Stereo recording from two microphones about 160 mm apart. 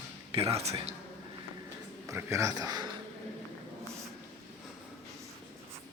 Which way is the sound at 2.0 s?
20° right (ahead or behind).